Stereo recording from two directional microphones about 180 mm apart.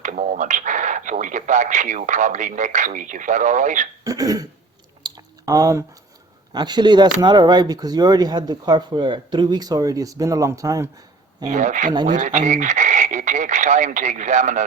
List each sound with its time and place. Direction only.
0.0 s speech: 45° right (ahead or behind)
4.0 s cough: 20° right (ahead or behind)
5.0 s squish: 20° right (ahead or behind)
6.5 s speech: 25° right (ahead or behind)
11.5 s speech: 45° right (ahead or behind)